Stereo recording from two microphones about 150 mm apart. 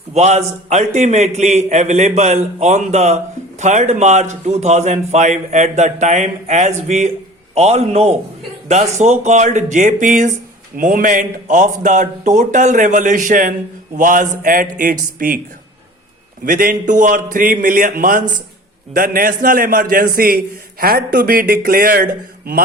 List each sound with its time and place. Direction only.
0.1 s a man's voice: 50° right (ahead or behind); by 15.4 s 70° right (ahead or behind)
16.5 s a man's voice: 65° right (ahead or behind)